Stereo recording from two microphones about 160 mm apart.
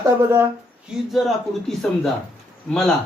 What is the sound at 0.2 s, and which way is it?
Speech, 15° right (ahead or behind).